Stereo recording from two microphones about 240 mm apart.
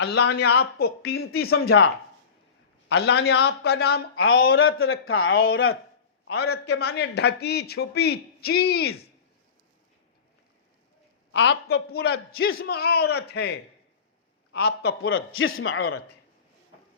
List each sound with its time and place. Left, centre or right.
0.1 s a man's voice: left
2.9 s speech: left
4.1 s a man's voice: left
5.3 s a man's voice: left
6.2 s a man's voice: left
6.5 s a man's voice: left
11.3 s a man's voice: left
14.5 s a man's voice: left